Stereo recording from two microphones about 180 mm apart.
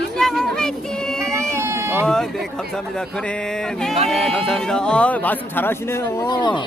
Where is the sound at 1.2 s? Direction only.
15° right (ahead or behind).